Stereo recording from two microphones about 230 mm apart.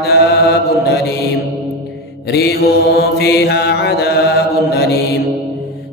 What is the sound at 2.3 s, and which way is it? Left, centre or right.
Mantra, left.